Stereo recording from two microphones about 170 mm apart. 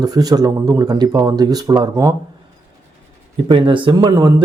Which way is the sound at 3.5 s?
30° right (ahead or behind).